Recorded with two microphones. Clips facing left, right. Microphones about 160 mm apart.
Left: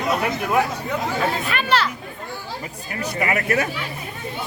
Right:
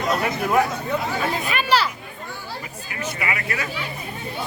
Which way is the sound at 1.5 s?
5° right (ahead or behind).